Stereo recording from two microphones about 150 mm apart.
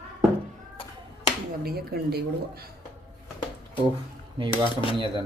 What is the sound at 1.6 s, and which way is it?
Speech, 90° right.